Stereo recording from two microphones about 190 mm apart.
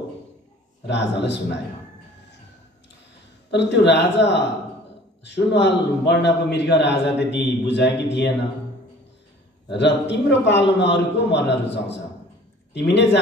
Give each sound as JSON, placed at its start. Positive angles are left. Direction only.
{"t": 0.8, "sound": "a man's voice", "side_deg": 65}
{"t": 3.4, "sound": "a man's voice", "side_deg": 65}
{"t": 9.7, "sound": "a man's voice", "side_deg": 65}